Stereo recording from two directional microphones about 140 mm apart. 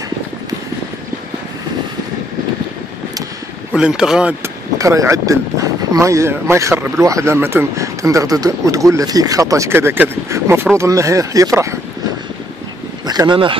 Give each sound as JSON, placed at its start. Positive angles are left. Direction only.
{"t": 3.7, "sound": "speech", "side_deg": -5}
{"t": 4.7, "sound": "speech", "side_deg": -25}
{"t": 13.0, "sound": "speech", "side_deg": -30}